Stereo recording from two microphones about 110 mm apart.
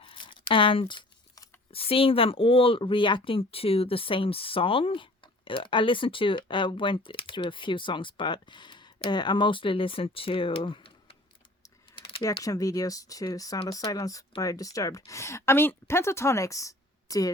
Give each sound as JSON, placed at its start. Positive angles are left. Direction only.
{"t": 0.0, "sound": "a sound", "side_deg": 50}
{"t": 1.7, "sound": "speech", "side_deg": 60}
{"t": 11.9, "sound": "typing", "side_deg": 55}
{"t": 12.4, "sound": "speech", "side_deg": 30}